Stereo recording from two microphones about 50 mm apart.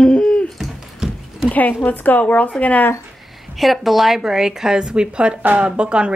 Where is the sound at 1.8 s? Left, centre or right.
Left.